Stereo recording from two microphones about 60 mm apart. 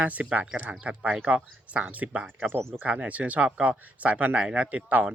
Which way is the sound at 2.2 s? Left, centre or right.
Right.